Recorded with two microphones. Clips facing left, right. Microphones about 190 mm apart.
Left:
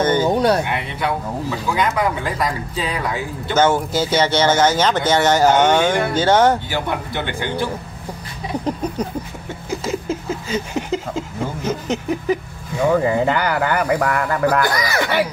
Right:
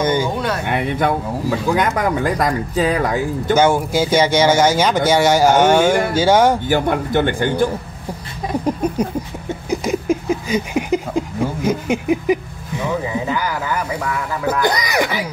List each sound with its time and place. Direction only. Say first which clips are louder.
0.0 s a sound: left 1 dB; 10° right (ahead or behind)
0.7 s speech: right 5 dB; 50° right (ahead or behind)
3.5 s speech: right 1 dB; 10° right (ahead or behind)
6.7 s speech: right 7 dB; 50° right (ahead or behind)
8.6 s speech: right 4 dB; 10° right (ahead or behind)
9.7 s a sound: right 4 dB; 15° right (ahead or behind)
13.3 s speech: left 3 dB; 70° left (ahead or behind)
14.6 s speech: right 2 dB; 20° right (ahead or behind)